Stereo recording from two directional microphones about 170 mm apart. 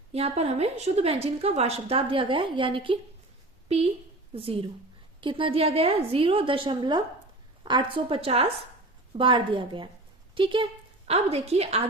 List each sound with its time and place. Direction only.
0.1 s a woman's voice: 35° right (ahead or behind)
5.2 s a woman's voice: 30° right (ahead or behind)